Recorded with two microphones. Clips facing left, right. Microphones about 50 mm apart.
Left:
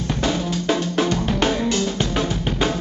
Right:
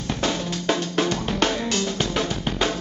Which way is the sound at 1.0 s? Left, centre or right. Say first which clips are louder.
Left 3 dB; centre.